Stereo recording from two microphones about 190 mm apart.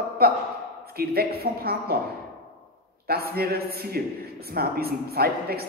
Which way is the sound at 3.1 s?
55° right (ahead or behind).